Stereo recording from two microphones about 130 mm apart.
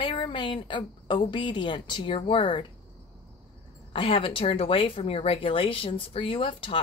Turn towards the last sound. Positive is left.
turn(degrees=40)  # may be behind; listen again after turning